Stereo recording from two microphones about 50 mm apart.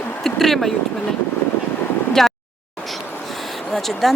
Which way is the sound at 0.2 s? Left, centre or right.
Centre.